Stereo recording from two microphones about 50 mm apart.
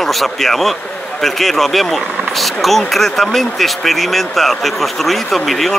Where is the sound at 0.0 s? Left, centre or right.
Centre.